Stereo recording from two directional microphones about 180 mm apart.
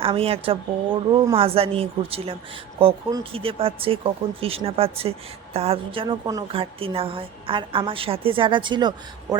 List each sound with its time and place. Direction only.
0.0 s a woman's voice: 30° right (ahead or behind)